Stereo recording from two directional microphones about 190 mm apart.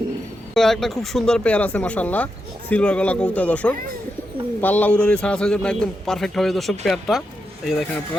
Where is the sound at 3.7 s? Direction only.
50° right (ahead or behind).